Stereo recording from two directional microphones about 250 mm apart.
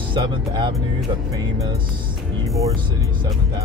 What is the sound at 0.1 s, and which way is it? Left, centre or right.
Speech, centre.